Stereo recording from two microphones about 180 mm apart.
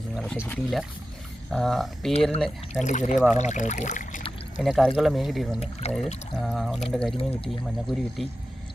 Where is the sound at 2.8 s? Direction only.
45° left (ahead or behind).